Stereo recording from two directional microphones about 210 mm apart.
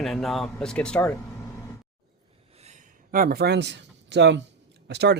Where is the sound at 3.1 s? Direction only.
45° right (ahead or behind).